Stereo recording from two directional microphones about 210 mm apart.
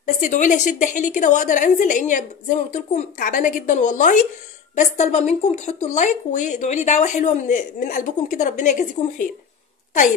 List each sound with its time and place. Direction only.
0.0 s speech: 35° left (ahead or behind)